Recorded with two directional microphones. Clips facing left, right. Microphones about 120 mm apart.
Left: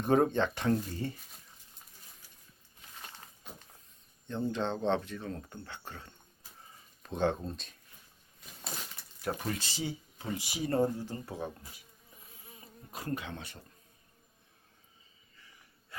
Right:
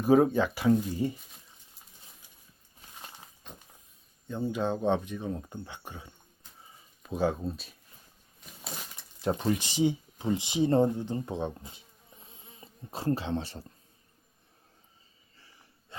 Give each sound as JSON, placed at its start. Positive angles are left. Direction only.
{"t": 0.0, "sound": "speech", "side_deg": -5}
{"t": 4.3, "sound": "speech", "side_deg": -10}
{"t": 8.6, "sound": "a sound", "side_deg": 0}
{"t": 9.2, "sound": "speech", "side_deg": -25}
{"t": 12.2, "sound": "insect", "side_deg": -25}
{"t": 15.4, "sound": "a sound", "side_deg": -30}